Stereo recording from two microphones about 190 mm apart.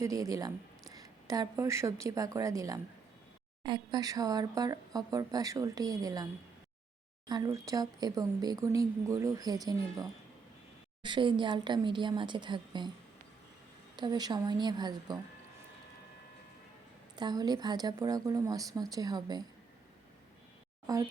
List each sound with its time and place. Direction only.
0.0 s speech: 15° right (ahead or behind)
7.3 s speech: 20° right (ahead or behind)
13.9 s speech: 20° right (ahead or behind)
17.2 s speech: 20° right (ahead or behind)
20.9 s speech: 20° right (ahead or behind)